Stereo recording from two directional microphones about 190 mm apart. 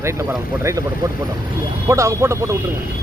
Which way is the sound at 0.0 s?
15° right (ahead or behind).